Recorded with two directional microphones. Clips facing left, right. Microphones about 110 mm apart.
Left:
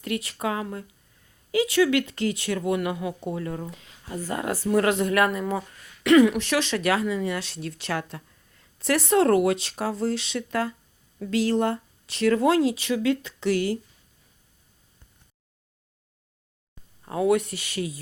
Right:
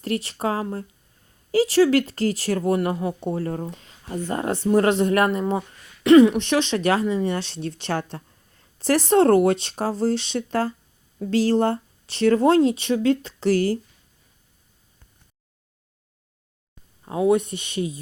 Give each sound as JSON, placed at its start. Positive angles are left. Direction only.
{"t": 0.0, "sound": "speech", "side_deg": -30}
{"t": 17.1, "sound": "speech", "side_deg": -20}